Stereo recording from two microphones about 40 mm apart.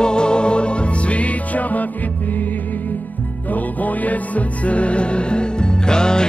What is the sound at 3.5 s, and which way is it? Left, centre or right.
Music, left.